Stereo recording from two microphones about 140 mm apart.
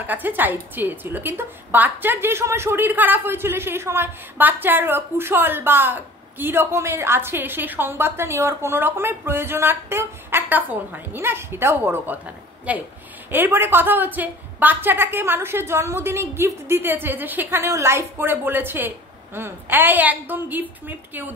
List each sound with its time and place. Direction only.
0.0 s a woman's voice: 15° right (ahead or behind)